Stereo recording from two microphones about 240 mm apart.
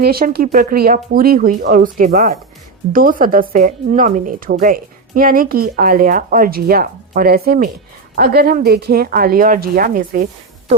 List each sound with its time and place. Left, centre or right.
0.0 s a woman's voice: right